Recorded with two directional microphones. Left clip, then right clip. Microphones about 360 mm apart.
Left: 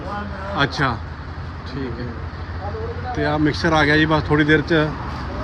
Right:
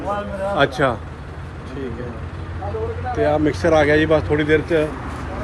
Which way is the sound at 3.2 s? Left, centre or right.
Centre.